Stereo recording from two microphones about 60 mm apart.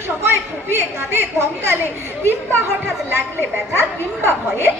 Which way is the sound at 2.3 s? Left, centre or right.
Right.